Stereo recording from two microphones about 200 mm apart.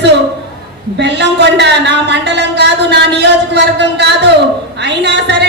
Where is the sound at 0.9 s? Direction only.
60° right (ahead or behind).